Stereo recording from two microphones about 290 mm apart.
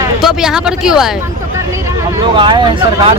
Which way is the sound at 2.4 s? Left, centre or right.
Centre.